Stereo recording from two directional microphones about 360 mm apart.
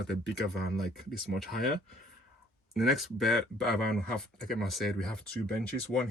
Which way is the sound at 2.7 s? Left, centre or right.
Centre.